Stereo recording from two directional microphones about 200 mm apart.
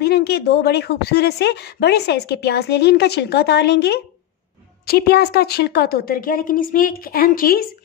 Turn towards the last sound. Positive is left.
turn(degrees=45)  # may be behind; listen again after turning